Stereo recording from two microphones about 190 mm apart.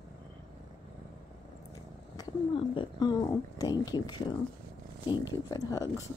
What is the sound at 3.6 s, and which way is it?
Speech, 20° left (ahead or behind).